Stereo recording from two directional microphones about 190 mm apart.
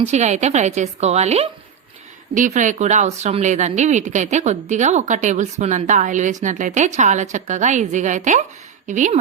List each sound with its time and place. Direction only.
0.0 s speech: 35° right (ahead or behind)